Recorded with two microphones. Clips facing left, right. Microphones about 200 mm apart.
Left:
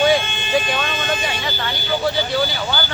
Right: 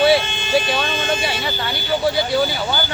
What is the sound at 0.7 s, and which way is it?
Speech, 30° right (ahead or behind).